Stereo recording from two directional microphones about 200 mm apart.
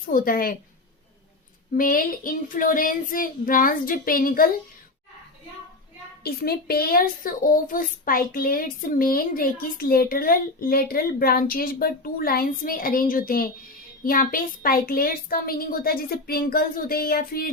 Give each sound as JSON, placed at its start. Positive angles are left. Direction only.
{"t": 0.1, "sound": "a child's voice", "side_deg": 45}
{"t": 1.7, "sound": "a child's voice", "side_deg": 45}
{"t": 6.2, "sound": "a child's voice", "side_deg": 50}